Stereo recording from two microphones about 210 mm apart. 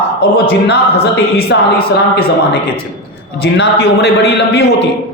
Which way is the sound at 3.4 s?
55° left (ahead or behind).